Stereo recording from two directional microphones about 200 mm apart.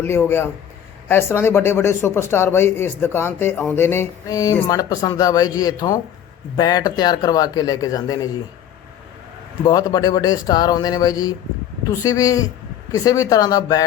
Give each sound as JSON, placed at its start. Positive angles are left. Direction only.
{"t": 0.0, "sound": "a man's voice", "side_deg": 10}
{"t": 9.6, "sound": "a man's voice", "side_deg": 20}